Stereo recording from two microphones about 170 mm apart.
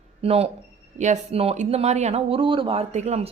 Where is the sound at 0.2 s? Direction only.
35° right (ahead or behind).